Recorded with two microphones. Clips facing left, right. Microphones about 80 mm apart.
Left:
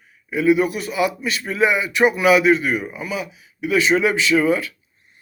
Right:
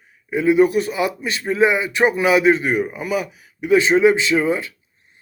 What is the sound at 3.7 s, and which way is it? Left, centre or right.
Speech, right.